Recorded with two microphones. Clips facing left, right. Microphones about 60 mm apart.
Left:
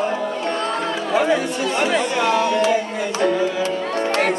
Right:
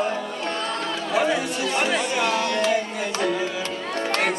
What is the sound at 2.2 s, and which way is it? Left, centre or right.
Music, centre.